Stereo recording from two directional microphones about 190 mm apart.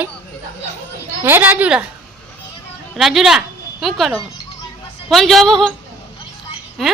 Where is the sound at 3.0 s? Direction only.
Centre (ahead or behind).